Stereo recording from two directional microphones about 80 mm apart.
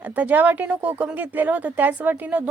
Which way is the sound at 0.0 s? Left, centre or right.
Centre.